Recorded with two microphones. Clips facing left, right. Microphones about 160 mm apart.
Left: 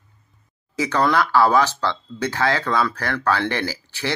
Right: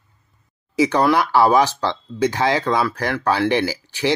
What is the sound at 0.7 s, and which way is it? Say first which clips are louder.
Speech: right 3 dB; 15° right (ahead or behind).